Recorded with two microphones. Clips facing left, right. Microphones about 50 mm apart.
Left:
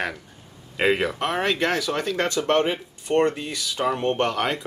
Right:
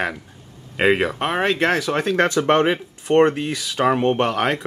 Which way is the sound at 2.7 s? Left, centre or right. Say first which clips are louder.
Right 5 dB; right.